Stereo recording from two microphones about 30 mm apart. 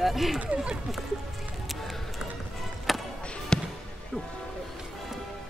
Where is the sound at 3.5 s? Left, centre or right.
Left.